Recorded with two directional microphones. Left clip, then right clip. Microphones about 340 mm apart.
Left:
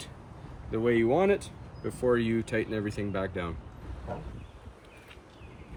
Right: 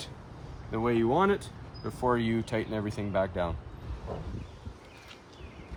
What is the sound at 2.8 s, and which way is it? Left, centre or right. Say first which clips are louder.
Speech: right 3 dB; right.